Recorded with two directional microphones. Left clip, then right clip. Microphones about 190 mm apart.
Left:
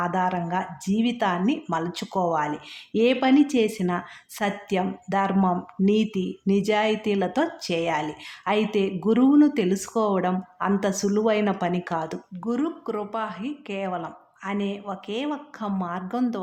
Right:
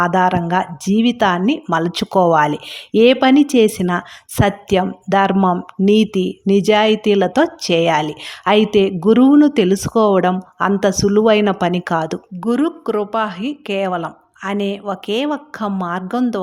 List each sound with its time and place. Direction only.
0.0 s speech: 40° right (ahead or behind)